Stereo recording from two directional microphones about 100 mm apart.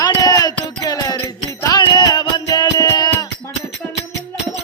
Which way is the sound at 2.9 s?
45° left (ahead or behind).